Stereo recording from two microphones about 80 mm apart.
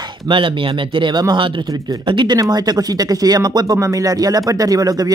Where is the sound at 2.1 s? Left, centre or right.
Right.